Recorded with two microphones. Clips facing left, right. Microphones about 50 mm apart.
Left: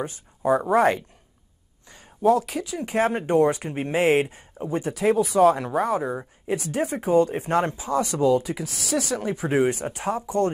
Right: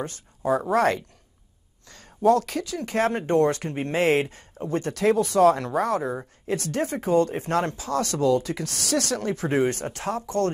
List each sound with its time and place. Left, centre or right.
0.4 s speech: centre
0.7 s speech: centre
1.9 s a sound: centre
2.2 s speech: centre